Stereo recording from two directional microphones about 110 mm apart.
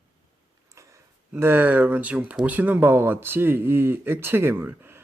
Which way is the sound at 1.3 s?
20° right (ahead or behind).